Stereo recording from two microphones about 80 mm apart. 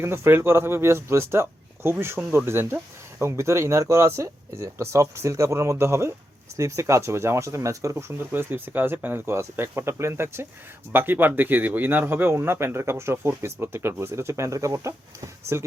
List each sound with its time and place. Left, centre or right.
0.0 s speech: right